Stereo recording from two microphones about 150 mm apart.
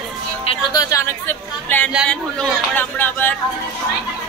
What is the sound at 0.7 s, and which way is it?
A woman's voice, 25° left (ahead or behind).